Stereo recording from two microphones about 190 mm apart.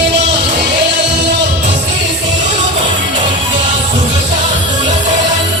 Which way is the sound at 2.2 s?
40° right (ahead or behind).